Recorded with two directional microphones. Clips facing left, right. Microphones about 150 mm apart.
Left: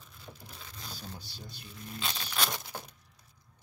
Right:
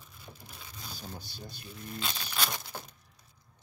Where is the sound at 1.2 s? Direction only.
50° right (ahead or behind).